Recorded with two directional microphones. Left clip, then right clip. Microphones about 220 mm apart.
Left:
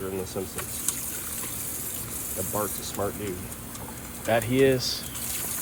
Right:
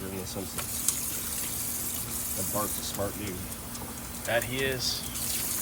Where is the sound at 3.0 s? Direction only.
25° left (ahead or behind).